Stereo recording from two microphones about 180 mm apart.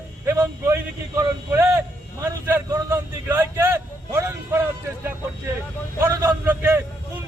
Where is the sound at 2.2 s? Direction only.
15° right (ahead or behind).